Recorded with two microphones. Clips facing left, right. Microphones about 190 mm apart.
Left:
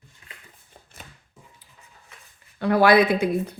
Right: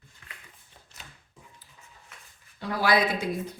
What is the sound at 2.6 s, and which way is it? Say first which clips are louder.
Speech: left 8 dB; 60° left (ahead or behind).